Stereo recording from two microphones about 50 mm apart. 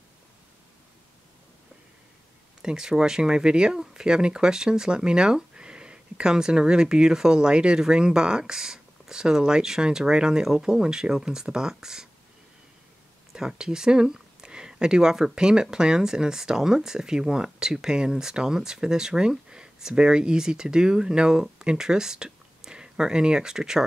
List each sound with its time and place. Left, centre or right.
2.6 s speech: centre
13.5 s speech: centre